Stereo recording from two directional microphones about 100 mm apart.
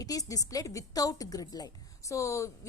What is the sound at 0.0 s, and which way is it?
A woman's voice, 35° left (ahead or behind).